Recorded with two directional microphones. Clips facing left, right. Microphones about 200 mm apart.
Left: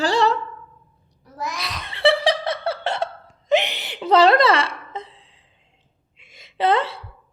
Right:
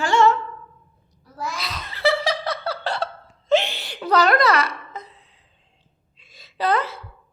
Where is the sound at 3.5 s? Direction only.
15° left (ahead or behind).